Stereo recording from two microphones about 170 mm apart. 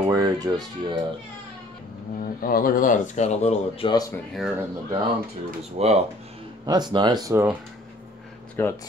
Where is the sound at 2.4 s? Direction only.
55° left (ahead or behind); by 4.1 s 25° left (ahead or behind).